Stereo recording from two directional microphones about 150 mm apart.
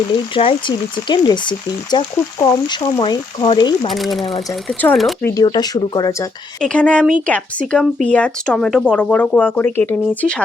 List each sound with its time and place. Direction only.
0.3 s speech: 35° left (ahead or behind)
3.9 s speech: centre (ahead or behind)
5.2 s speech: 20° left (ahead or behind)
6.6 s speech: 5° left (ahead or behind)